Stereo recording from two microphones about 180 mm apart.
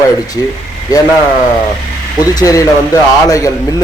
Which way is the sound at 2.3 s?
20° left (ahead or behind).